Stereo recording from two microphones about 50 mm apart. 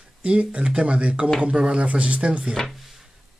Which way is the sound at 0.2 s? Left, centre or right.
Right.